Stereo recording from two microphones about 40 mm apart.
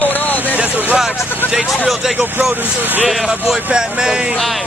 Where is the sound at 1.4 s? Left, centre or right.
Left.